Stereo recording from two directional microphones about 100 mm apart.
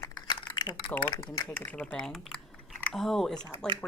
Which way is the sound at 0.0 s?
45° left (ahead or behind).